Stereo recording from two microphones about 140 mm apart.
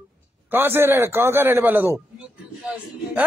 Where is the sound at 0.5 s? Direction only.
15° right (ahead or behind).